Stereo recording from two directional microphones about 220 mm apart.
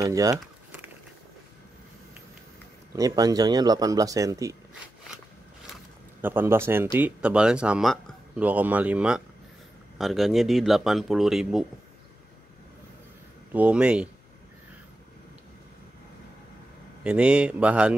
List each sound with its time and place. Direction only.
0.0 s a sound: 15° right (ahead or behind)
3.0 s speech: 15° right (ahead or behind)
6.2 s speech: 10° right (ahead or behind)
13.5 s speech: 5° right (ahead or behind)
17.0 s speech: 5° right (ahead or behind)